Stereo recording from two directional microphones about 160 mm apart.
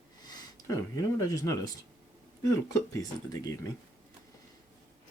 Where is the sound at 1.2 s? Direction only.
20° left (ahead or behind).